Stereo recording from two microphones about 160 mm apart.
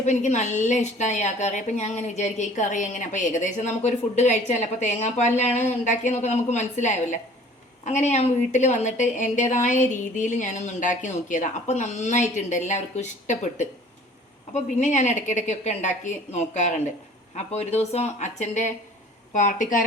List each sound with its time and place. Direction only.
0.0 s a woman's voice: 50° left (ahead or behind)